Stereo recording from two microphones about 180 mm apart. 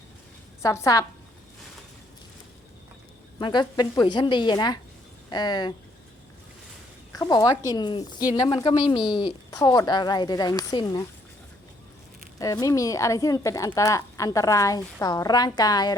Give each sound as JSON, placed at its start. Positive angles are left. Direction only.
{"t": 0.6, "sound": "a woman's voice", "side_deg": 15}
{"t": 3.3, "sound": "a woman's voice", "side_deg": 25}
{"t": 7.1, "sound": "a woman's voice", "side_deg": 20}
{"t": 12.4, "sound": "a woman's voice", "side_deg": 20}